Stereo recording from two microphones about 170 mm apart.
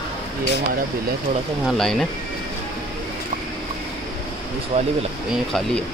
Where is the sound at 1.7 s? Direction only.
Centre (ahead or behind).